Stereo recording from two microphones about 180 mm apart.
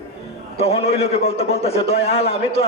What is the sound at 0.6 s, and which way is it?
A man's voice, 35° left (ahead or behind).